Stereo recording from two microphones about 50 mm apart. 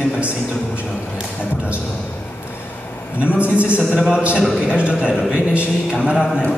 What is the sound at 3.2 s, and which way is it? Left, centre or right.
Speech, right.